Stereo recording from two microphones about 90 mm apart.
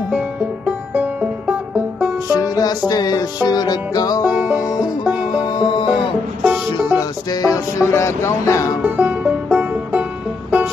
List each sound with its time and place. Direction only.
0.7 s music: 20° right (ahead or behind)
2.3 s music: 40° left (ahead or behind)
4.3 s music: 15° right (ahead or behind)
5.3 s music: 55° left (ahead or behind)
6.4 s music: 15° right (ahead or behind)
7.0 s music: 45° left (ahead or behind)
8.8 s music: 20° right (ahead or behind)